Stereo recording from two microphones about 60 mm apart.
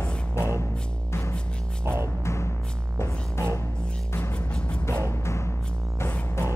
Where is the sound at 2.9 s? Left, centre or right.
Left.